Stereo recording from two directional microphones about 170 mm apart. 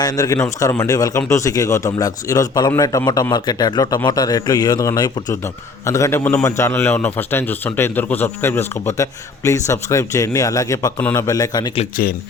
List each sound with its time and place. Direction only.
0.0 s a man's voice: 20° left (ahead or behind)